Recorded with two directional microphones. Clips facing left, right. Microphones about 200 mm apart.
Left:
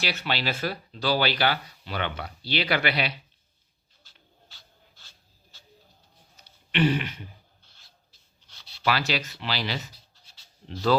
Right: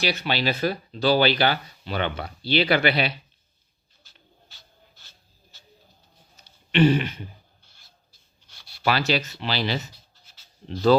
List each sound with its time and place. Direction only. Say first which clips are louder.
0.0 s speech: right 4 dB; 15° right (ahead or behind)
4.5 s dog: right 2 dB; 15° right (ahead or behind)
6.7 s speech: right 5 dB; 30° right (ahead or behind)
8.8 s speech: right 3 dB; 25° right (ahead or behind)